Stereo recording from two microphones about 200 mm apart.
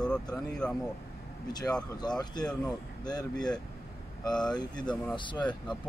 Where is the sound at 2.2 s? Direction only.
20° left (ahead or behind).